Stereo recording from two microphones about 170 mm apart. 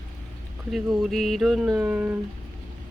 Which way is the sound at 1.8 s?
10° right (ahead or behind).